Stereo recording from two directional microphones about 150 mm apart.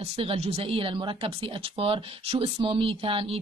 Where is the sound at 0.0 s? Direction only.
40° right (ahead or behind).